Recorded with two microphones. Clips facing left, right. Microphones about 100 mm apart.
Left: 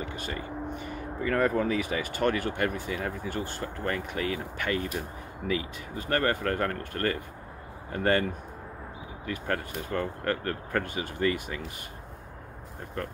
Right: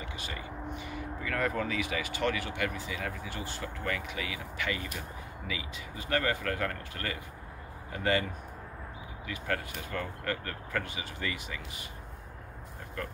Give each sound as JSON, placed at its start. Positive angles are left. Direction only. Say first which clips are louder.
{"t": 0.1, "sound": "speech", "louder": "left 5 dB", "side_deg": 45}